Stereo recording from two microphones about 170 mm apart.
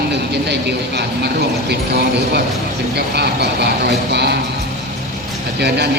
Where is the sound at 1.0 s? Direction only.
75° right (ahead or behind).